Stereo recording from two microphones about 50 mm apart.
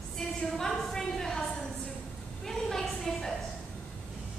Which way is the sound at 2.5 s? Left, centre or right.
Centre.